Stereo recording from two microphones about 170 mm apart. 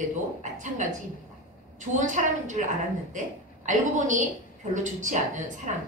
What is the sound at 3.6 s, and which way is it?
A man's voice, 50° right (ahead or behind).